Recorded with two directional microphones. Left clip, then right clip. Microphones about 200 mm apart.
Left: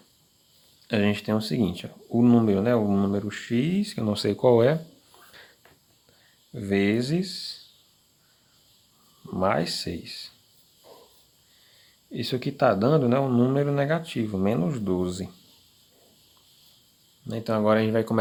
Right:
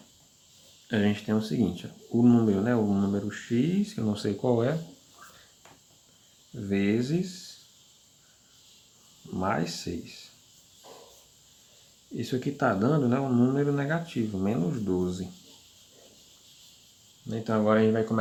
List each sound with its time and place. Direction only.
0.9 s speech: 45° left (ahead or behind)
6.7 s speech: 45° left (ahead or behind)
9.3 s speech: 45° left (ahead or behind)
12.1 s speech: 40° left (ahead or behind)
17.2 s speech: 50° left (ahead or behind)